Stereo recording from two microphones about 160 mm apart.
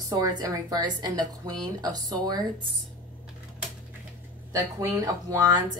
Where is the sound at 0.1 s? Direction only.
25° right (ahead or behind).